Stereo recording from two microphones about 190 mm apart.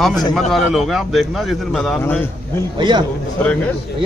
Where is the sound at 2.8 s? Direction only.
25° right (ahead or behind).